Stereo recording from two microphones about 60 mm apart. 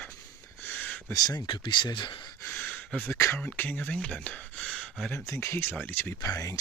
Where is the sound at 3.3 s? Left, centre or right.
Left.